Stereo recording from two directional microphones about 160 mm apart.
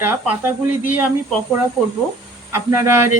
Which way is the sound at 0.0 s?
15° right (ahead or behind).